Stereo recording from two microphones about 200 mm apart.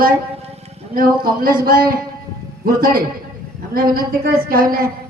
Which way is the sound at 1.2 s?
45° right (ahead or behind).